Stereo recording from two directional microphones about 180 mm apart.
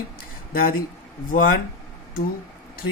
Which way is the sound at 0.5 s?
55° left (ahead or behind).